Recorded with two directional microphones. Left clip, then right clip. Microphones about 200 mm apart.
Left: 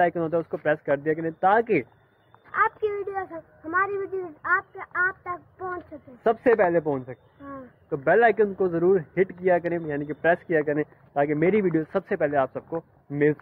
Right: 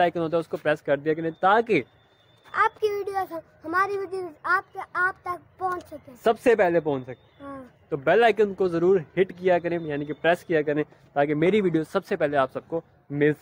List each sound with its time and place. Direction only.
0.0 s a child's voice: 15° right (ahead or behind)